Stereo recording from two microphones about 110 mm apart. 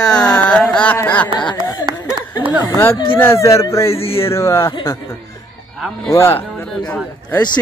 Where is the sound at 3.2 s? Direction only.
25° left (ahead or behind).